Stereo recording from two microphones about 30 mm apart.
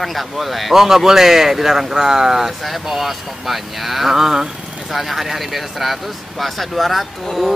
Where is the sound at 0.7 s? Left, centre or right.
Centre.